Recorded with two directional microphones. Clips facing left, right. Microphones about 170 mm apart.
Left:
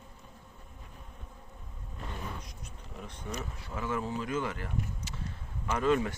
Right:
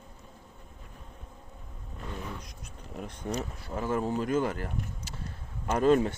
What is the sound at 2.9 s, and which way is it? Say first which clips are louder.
Speech: right 6 dB; 45° right (ahead or behind).